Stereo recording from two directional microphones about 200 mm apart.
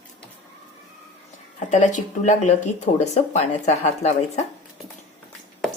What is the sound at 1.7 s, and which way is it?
A woman's voice, 40° left (ahead or behind).